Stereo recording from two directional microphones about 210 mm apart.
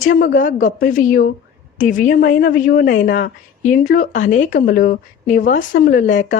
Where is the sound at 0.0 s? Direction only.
40° left (ahead or behind).